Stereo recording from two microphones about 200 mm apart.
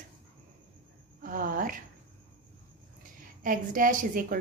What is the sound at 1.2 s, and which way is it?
Speech, 45° right (ahead or behind).